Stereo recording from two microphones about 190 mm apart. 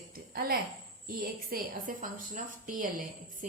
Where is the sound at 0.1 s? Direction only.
50° right (ahead or behind).